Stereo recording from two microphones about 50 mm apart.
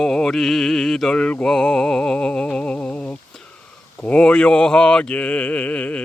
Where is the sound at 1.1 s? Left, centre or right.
Left.